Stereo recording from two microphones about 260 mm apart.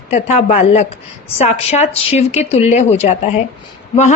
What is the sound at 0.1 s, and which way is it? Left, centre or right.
A woman's voice, left.